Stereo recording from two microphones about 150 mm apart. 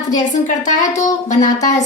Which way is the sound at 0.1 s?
55° left (ahead or behind).